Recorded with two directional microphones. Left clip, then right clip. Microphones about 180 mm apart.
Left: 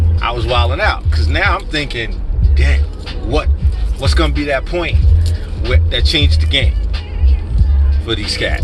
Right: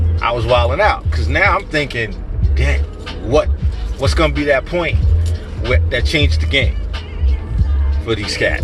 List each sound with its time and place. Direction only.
0.2 s music: 15° right (ahead or behind)
0.5 s speech: 20° right (ahead or behind)
3.2 s speech: 20° right (ahead or behind)
8.0 s speech: 20° right (ahead or behind)